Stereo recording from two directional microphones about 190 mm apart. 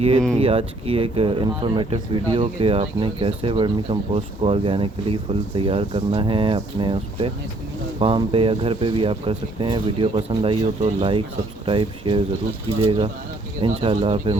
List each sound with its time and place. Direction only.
0.3 s speech: 30° right (ahead or behind)